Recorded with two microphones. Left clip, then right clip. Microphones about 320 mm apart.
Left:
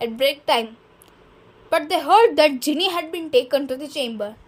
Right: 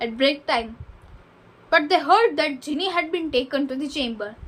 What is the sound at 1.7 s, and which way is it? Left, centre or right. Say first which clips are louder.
A woman's voice: left 1 dB; left.